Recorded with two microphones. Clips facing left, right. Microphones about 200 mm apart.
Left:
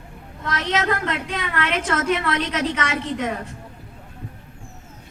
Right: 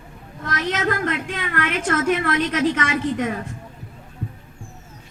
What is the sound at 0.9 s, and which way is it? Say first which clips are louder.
A woman's voice: right 1 dB; 50° right (ahead or behind).